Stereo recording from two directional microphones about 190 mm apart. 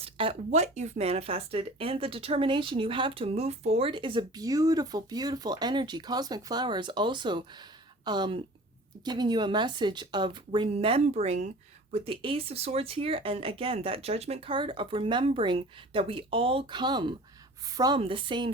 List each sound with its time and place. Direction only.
0.0 s speech: 30° right (ahead or behind)